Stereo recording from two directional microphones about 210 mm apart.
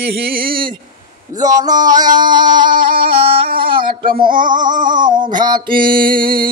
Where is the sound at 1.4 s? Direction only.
15° right (ahead or behind).